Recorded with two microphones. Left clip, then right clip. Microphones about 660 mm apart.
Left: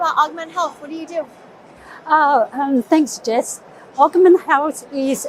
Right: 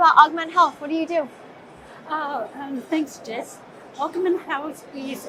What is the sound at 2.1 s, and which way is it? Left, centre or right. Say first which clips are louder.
A woman's voice: left 13 dB; left.